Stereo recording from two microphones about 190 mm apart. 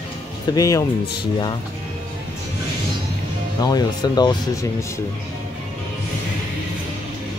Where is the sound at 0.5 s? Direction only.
15° left (ahead or behind).